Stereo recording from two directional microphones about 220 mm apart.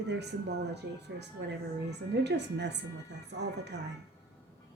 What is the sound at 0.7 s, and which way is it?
A woman's voice, 50° right (ahead or behind).